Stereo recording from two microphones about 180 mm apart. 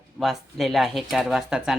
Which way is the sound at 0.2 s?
Centre (ahead or behind).